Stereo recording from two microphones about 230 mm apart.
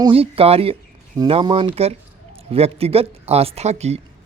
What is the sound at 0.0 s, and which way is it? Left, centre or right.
Speech, right.